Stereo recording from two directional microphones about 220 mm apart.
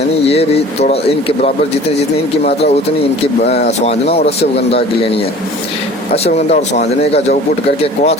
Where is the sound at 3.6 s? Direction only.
30° left (ahead or behind).